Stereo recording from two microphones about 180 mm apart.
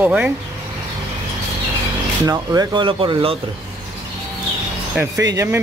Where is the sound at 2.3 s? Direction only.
20° right (ahead or behind).